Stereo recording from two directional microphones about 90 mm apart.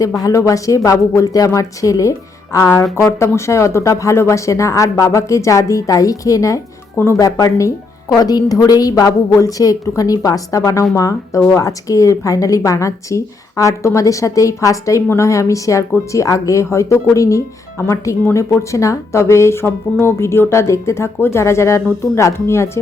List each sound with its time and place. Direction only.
0.2 s speech: 35° left (ahead or behind)
7.2 s speech: 45° left (ahead or behind)